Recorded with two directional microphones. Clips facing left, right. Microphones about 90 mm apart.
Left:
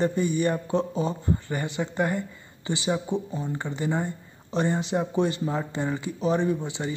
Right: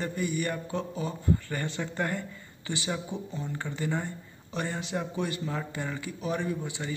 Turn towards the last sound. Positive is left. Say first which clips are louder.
# left 6 dB
turn(degrees=25)  # may be behind; listen again after turning